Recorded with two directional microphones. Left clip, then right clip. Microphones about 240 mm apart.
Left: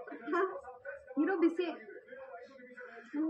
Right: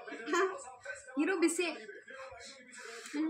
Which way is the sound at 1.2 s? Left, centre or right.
Right.